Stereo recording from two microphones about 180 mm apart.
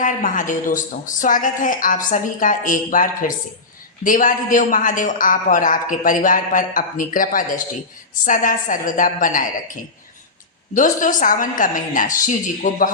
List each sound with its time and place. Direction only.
0.0 s a man's voice: 45° left (ahead or behind)
10.8 s a man's voice: 45° left (ahead or behind)